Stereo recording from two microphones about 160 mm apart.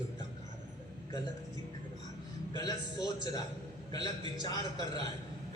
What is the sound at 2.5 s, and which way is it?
A man's voice, 25° left (ahead or behind).